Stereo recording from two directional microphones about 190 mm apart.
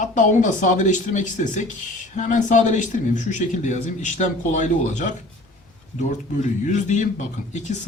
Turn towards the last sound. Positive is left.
turn(degrees=40)  # may be behind; listen again after turning